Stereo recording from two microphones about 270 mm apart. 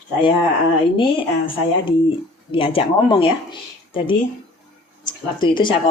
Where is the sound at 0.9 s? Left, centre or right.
Centre.